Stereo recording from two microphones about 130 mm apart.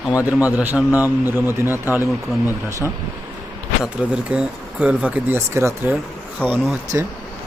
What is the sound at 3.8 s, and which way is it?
Speech, 10° right (ahead or behind).